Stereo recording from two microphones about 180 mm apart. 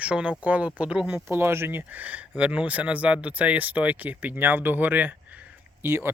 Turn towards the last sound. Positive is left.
turn(degrees=-15)  # may be behind; listen again after turning